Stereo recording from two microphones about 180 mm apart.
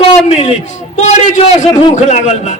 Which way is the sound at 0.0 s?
40° left (ahead or behind).